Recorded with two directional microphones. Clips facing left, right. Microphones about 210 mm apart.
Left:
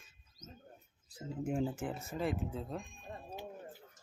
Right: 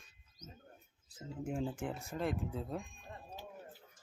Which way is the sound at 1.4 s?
20° left (ahead or behind).